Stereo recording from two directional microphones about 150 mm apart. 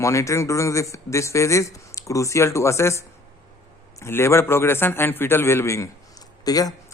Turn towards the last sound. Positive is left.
turn(degrees=25)  # may be behind; listen again after turning